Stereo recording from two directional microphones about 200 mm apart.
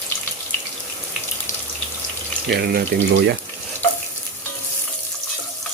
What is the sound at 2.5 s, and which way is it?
Speech, 55° right (ahead or behind).